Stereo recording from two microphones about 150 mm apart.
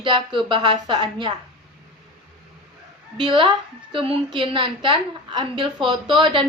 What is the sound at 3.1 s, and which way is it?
A woman's voice, 35° right (ahead or behind).